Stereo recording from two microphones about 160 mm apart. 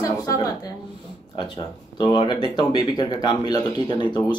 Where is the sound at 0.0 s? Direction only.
20° left (ahead or behind).